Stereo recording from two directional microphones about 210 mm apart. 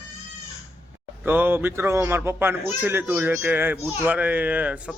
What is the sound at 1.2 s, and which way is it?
A man's voice, 10° right (ahead or behind).